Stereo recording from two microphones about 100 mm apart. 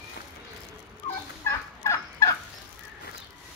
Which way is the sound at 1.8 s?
30° left (ahead or behind).